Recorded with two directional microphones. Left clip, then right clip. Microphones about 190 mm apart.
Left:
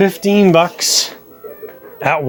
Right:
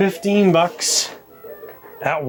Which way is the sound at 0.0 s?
40° left (ahead or behind).